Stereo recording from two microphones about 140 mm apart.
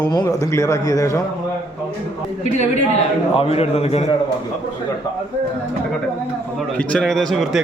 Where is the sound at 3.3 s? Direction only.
45° left (ahead or behind).